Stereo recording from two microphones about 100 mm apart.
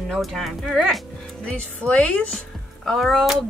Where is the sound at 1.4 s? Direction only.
10° left (ahead or behind).